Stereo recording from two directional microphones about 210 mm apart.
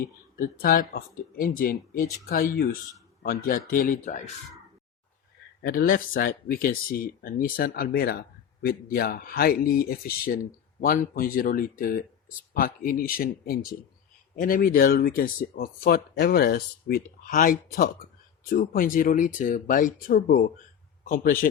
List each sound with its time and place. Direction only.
0.3 s speech: 45° left (ahead or behind)
5.6 s a man's voice: 45° left (ahead or behind)